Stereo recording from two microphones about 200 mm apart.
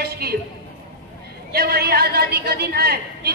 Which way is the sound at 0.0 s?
50° right (ahead or behind).